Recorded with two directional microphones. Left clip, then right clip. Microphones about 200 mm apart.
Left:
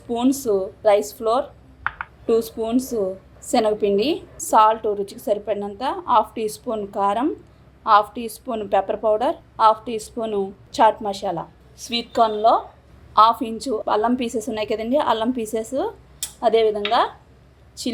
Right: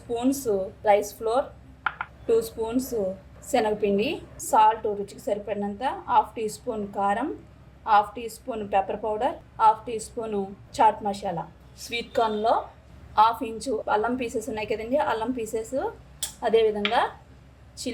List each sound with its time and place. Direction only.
0.1 s a woman's voice: 35° left (ahead or behind)